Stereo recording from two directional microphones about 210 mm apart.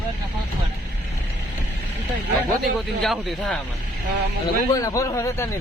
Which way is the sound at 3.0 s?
Centre (ahead or behind).